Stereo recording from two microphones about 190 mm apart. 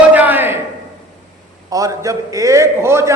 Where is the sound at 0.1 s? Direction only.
10° right (ahead or behind).